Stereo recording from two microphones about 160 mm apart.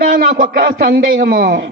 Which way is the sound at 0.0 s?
60° right (ahead or behind).